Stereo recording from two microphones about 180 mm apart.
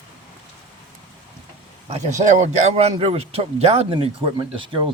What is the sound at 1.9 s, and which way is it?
A man's voice, 40° right (ahead or behind).